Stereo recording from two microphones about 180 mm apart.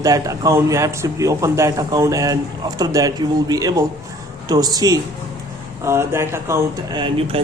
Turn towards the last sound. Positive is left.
turn(degrees=-30)  # may be behind; listen again after turning